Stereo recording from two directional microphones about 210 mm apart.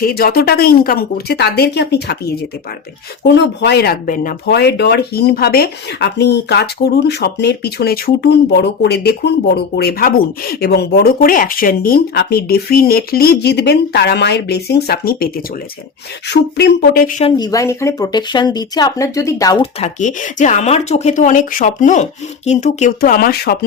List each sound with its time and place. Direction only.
0.0 s speech: 45° left (ahead or behind)
17.2 s speech: 20° left (ahead or behind)
19.8 s speech: 35° left (ahead or behind)